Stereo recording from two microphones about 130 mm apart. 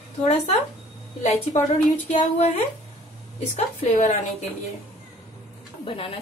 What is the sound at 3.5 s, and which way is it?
Speech, 60° left (ahead or behind).